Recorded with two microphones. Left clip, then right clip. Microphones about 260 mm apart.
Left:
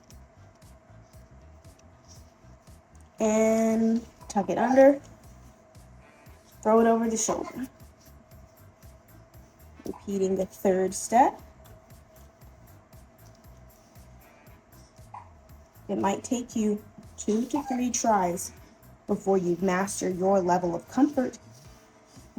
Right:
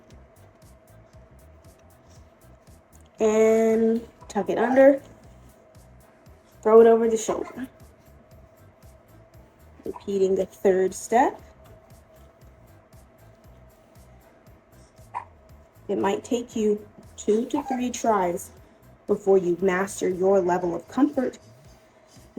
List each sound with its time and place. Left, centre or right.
3.2 s a sound: left
4.4 s speech: left
6.6 s speech: left
10.0 s speech: left
15.9 s speech: left